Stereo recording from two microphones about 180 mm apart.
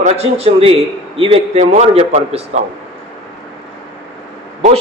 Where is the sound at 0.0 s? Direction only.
35° right (ahead or behind).